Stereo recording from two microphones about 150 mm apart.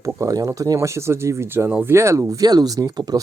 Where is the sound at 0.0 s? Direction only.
20° right (ahead or behind).